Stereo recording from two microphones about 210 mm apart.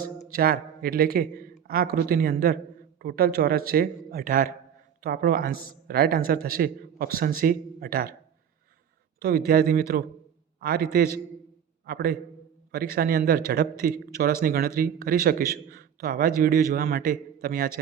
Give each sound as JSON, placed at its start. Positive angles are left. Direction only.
{"t": 0.3, "sound": "a man's voice", "side_deg": -45}
{"t": 9.1, "sound": "a man's voice", "side_deg": -50}
{"t": 11.9, "sound": "speech", "side_deg": -45}